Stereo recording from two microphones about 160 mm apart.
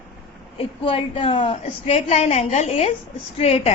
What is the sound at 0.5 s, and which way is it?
A woman's voice, 35° left (ahead or behind).